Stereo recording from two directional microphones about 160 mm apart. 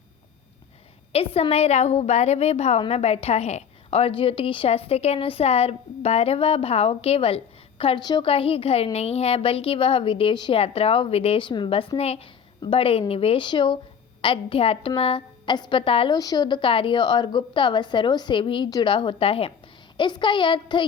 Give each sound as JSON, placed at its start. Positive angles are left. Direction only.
{"t": 1.1, "sound": "a woman's voice", "side_deg": 40}
{"t": 16.1, "sound": "a woman's voice", "side_deg": 25}